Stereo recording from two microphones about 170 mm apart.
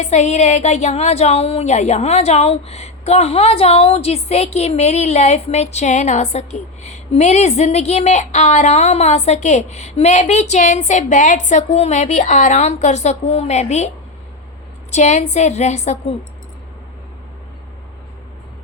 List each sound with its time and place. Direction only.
0.0 s a woman's voice: 40° left (ahead or behind)